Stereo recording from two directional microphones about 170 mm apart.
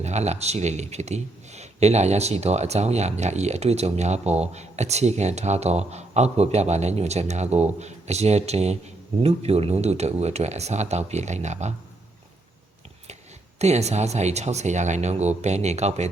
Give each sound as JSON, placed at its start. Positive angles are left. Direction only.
{"t": 0.0, "sound": "speech", "side_deg": -40}
{"t": 13.6, "sound": "speech", "side_deg": -40}